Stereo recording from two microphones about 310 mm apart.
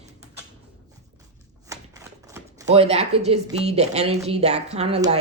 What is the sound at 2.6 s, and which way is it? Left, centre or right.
Speech, centre.